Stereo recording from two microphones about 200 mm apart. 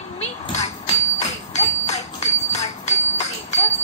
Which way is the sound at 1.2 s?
35° left (ahead or behind).